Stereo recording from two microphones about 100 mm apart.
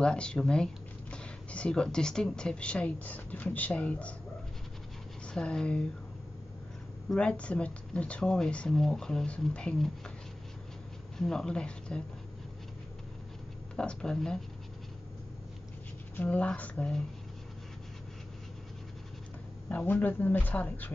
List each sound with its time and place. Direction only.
0.0 s speech: 10° left (ahead or behind)
5.2 s speech: 10° left (ahead or behind)
7.1 s speech: 10° left (ahead or behind)
11.1 s speech: 5° left (ahead or behind)
13.7 s speech: 10° left (ahead or behind)
16.2 s speech: 15° left (ahead or behind)
19.7 s speech: 15° left (ahead or behind)